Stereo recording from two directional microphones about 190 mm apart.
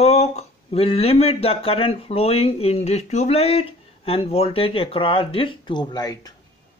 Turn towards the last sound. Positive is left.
turn(degrees=20)  # may be behind; listen again after turning